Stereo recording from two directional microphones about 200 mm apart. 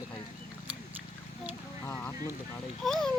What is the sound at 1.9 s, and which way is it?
Speech, 10° left (ahead or behind).